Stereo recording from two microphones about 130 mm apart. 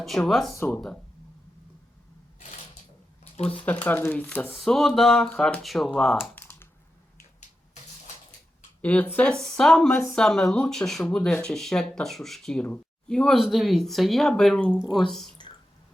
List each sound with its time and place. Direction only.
0.0 s speech: centre (ahead or behind)
0.5 s speech: 15° left (ahead or behind)
3.5 s speech: 10° left (ahead or behind)
4.5 s speech: centre (ahead or behind)
6.3 s a sound: 15° left (ahead or behind)
8.8 s speech: 15° left (ahead or behind)